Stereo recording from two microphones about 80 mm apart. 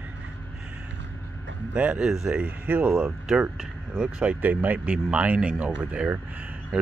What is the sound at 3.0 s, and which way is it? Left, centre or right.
Speech, centre.